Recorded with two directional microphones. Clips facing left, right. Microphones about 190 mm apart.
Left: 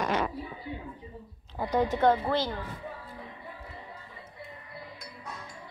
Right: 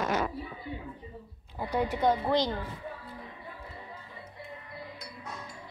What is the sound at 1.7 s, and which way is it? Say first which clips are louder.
Speech: left 3 dB; 10° right (ahead or behind).